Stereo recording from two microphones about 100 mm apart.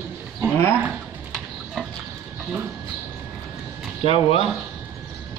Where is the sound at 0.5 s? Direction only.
25° left (ahead or behind).